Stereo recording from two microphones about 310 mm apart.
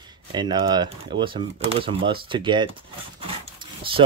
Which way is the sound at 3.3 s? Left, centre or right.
Centre.